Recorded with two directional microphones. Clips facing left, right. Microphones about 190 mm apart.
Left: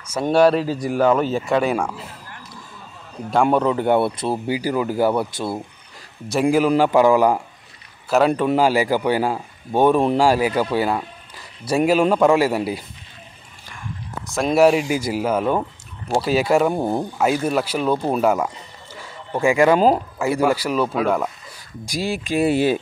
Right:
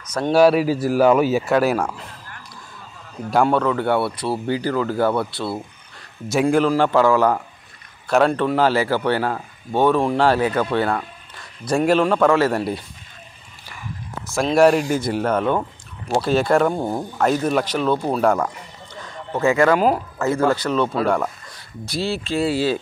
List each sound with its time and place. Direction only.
0.3 s speech: 5° right (ahead or behind)
3.4 s speech: 15° left (ahead or behind)
6.4 s speech: 10° left (ahead or behind)
16.8 s speech: 20° left (ahead or behind)
17.2 s speech: 5° left (ahead or behind)
18.9 s a sound: 10° left (ahead or behind)
20.2 s speech: 15° left (ahead or behind)